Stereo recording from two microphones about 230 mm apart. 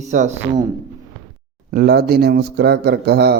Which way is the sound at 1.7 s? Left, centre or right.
Right.